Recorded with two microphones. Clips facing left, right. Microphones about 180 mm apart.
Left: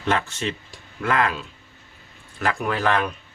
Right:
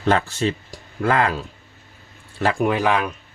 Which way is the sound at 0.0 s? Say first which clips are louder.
Right 5 dB; 35° right (ahead or behind).